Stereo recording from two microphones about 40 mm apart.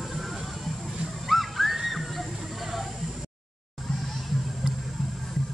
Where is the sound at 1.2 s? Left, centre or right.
Centre.